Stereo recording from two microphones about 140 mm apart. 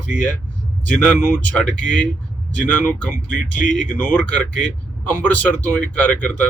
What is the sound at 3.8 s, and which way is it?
Speech, 10° left (ahead or behind).